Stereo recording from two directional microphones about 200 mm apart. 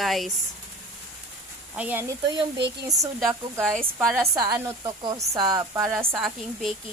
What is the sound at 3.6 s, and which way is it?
Speech, centre (ahead or behind).